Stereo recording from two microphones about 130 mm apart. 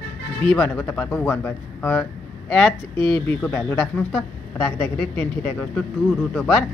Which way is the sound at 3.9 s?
5° left (ahead or behind).